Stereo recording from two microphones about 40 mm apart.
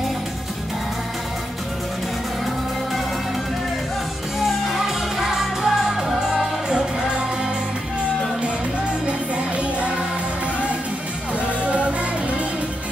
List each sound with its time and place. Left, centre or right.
4.4 s music: centre
9.6 s music: right